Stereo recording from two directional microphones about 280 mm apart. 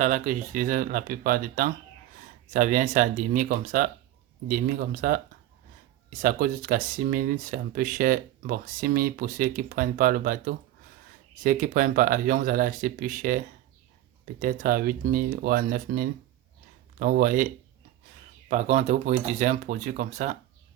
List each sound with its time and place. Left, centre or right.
0.0 s speech: right
6.2 s speech: right